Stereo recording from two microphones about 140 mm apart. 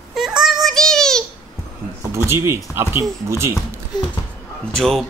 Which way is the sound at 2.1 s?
20° right (ahead or behind).